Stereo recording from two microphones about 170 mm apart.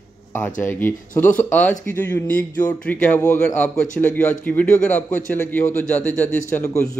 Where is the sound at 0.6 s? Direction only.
10° left (ahead or behind).